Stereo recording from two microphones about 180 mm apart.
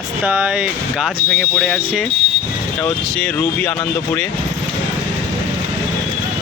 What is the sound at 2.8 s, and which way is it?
Speech, 10° left (ahead or behind).